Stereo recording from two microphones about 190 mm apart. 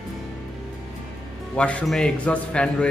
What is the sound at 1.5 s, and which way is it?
A man's voice, 5° left (ahead or behind).